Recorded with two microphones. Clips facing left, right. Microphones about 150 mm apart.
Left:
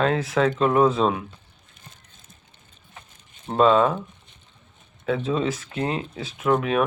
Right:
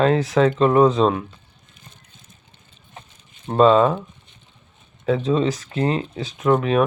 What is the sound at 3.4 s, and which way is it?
Speech, centre (ahead or behind).